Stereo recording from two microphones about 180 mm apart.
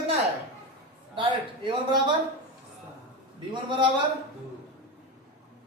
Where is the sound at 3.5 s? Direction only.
25° right (ahead or behind).